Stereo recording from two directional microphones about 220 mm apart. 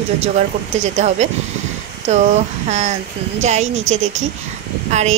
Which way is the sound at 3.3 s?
30° right (ahead or behind).